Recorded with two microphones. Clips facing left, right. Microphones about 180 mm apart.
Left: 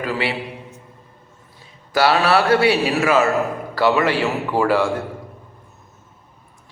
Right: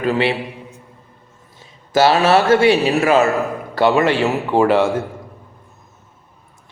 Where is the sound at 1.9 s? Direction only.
25° right (ahead or behind).